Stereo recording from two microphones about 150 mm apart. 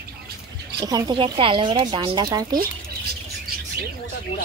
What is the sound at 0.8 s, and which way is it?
Speech, 25° right (ahead or behind).